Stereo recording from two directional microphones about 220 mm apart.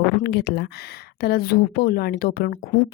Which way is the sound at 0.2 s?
50° left (ahead or behind).